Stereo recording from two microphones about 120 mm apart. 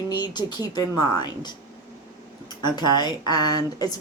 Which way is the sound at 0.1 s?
35° left (ahead or behind).